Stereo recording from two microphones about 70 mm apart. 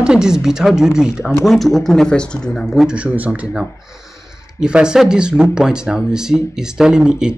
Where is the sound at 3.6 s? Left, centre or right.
Centre.